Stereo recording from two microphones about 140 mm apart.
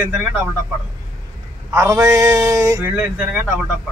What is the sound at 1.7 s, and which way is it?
Speech, 20° right (ahead or behind).